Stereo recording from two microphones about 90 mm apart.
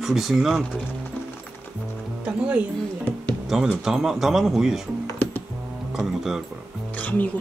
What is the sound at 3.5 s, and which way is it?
Speech, 5° right (ahead or behind).